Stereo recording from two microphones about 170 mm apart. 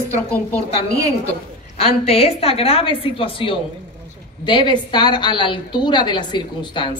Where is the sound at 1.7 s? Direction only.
35° left (ahead or behind).